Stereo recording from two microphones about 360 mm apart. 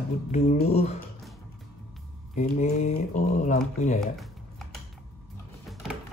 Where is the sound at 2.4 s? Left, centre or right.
Centre.